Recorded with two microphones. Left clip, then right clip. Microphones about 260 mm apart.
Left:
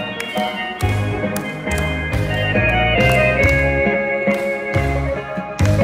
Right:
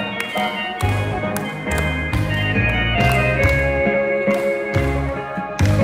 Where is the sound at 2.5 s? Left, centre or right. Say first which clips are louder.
Left 5 dB; centre; by 4.4 s left.